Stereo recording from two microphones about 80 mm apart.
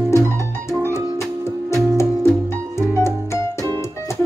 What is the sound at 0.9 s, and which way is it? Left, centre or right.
Music, left.